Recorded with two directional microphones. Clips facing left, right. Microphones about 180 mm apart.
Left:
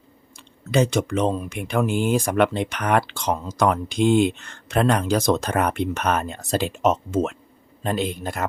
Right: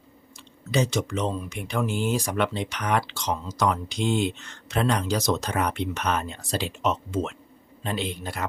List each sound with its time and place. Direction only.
0.7 s speech: 55° left (ahead or behind)